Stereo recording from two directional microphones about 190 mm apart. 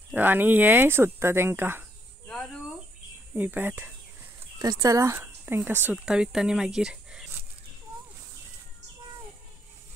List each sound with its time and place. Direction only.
0.1 s speech: 10° right (ahead or behind)
2.2 s cricket: centre (ahead or behind)
3.3 s speech: 10° right (ahead or behind)